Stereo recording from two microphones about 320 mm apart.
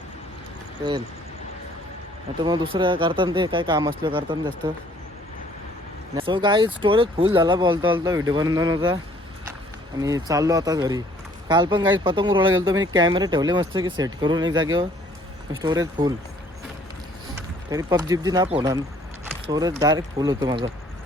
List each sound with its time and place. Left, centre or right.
2.4 s speech: centre
6.1 s speech: centre
10.0 s speech: centre
14.5 s speech: right
15.6 s speech: centre
17.3 s speech: centre